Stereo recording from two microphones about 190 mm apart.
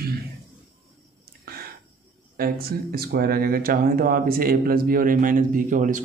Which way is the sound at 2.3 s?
50° right (ahead or behind).